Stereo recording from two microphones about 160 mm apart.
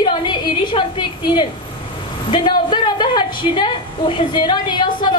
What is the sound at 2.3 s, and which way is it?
A woman's voice, 30° left (ahead or behind).